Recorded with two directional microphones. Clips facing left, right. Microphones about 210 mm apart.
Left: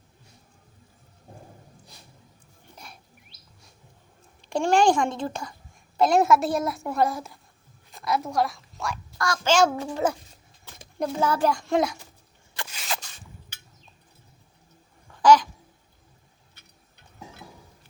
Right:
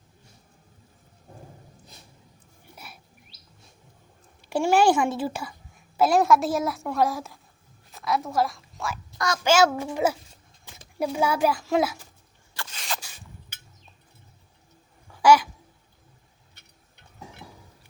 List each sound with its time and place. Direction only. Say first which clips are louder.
2.7 s a sound: even; 5° right (ahead or behind)
4.4 s a child's voice: even; 5° right (ahead or behind)
9.1 s a child's voice: right 1 dB; 20° right (ahead or behind)
9.8 s a woman's voice: right 1 dB; 10° right (ahead or behind)
12.5 s a sound: left 1 dB; 10° left (ahead or behind)
15.1 s babbling: left 1 dB; 10° right (ahead or behind)